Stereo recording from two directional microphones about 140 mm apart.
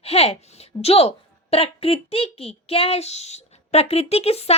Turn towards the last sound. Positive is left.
turn(degrees=45)  # may be behind; listen again after turning